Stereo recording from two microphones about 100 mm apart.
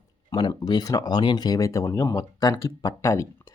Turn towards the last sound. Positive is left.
turn(degrees=35)  # may be behind; listen again after turning